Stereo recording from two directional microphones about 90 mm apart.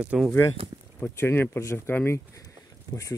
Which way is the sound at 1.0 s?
25° left (ahead or behind).